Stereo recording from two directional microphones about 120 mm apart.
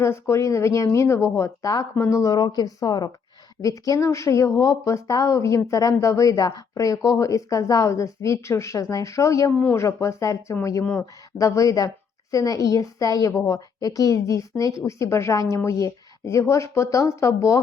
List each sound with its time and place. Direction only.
0.0 s speech: 25° left (ahead or behind)